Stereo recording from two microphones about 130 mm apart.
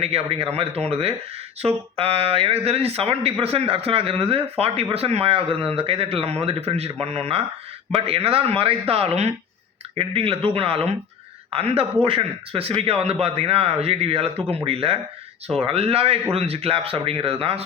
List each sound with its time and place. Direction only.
0.0 s speech: 50° right (ahead or behind)